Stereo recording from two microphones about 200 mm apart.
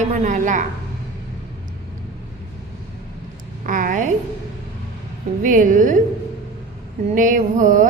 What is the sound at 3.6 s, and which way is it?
Speech, 40° right (ahead or behind).